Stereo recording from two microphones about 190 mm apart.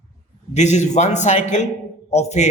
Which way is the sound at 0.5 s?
35° left (ahead or behind).